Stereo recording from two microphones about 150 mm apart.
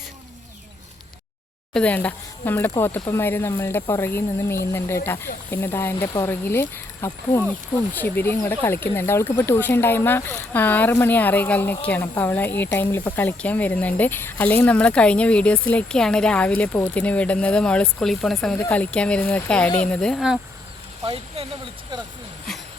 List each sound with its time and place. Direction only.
1.7 s speech: 10° left (ahead or behind)
21.0 s speech: 40° right (ahead or behind)
22.5 s a sound: centre (ahead or behind)